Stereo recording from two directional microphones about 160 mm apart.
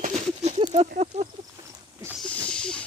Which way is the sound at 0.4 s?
45° right (ahead or behind).